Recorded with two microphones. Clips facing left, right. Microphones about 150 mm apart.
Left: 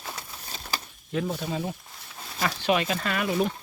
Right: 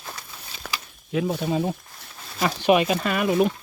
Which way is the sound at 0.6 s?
70° right (ahead or behind).